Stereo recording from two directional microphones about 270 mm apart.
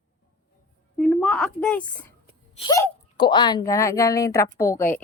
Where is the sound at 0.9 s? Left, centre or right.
Centre.